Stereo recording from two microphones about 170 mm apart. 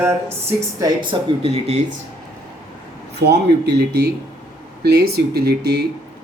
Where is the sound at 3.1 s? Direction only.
75° right (ahead or behind).